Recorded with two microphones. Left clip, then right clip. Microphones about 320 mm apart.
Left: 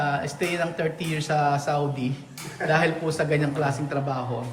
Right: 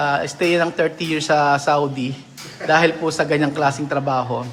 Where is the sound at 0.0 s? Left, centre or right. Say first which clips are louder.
Right 7 dB; centre.